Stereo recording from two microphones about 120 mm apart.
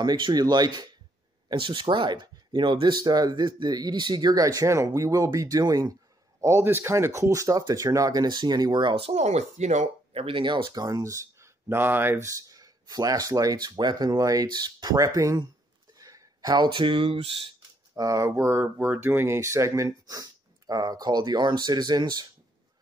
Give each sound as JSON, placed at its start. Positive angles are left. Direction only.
{"t": 0.0, "sound": "speech", "side_deg": -35}
{"t": 6.4, "sound": "speech", "side_deg": -20}
{"t": 10.2, "sound": "speech", "side_deg": -45}
{"t": 17.9, "sound": "speech", "side_deg": -25}